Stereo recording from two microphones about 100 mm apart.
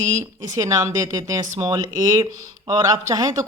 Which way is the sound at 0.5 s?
35° right (ahead or behind).